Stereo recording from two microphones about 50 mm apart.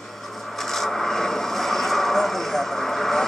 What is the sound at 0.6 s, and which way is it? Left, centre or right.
Vehicle, centre.